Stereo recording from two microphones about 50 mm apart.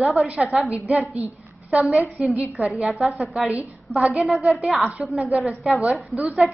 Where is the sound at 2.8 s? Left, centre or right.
Centre.